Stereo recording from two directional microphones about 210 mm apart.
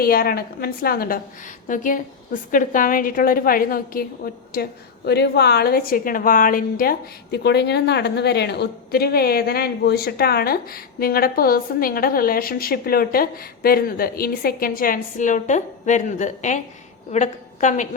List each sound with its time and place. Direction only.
0.0 s a woman's voice: 45° left (ahead or behind)